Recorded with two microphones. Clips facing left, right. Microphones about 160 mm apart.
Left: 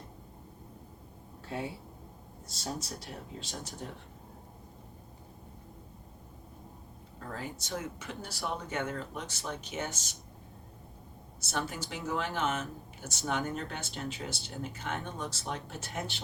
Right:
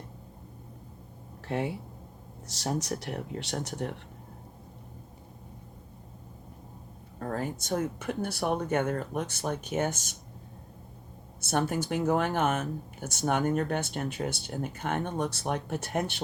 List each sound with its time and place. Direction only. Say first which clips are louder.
1.5 s speech: right 6 dB; 70° right (ahead or behind)
7.2 s speech: right 8 dB; 50° right (ahead or behind)
11.3 s speech: right 8 dB; 55° right (ahead or behind)